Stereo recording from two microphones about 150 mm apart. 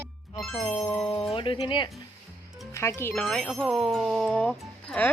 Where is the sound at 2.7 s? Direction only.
20° left (ahead or behind).